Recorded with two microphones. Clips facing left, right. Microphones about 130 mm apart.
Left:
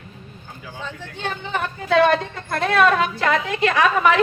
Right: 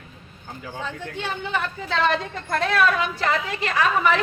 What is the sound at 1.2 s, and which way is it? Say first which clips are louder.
Speech: left 2 dB; 55° left (ahead or behind).